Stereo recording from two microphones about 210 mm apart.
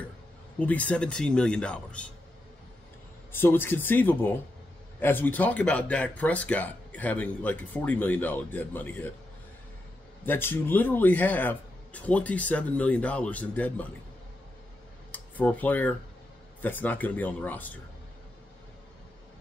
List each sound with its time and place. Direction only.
0.6 s speech: 5° left (ahead or behind)
3.3 s speech: 10° left (ahead or behind)
10.2 s speech: 10° left (ahead or behind)
15.0 s speech: 10° left (ahead or behind)